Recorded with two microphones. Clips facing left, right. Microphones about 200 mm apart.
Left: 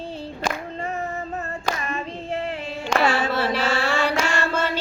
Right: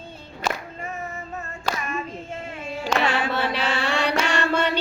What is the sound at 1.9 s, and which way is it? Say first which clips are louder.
Child singing: left 2 dB; 30° left (ahead or behind).